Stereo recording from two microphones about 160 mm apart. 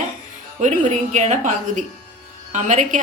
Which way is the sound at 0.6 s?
50° right (ahead or behind).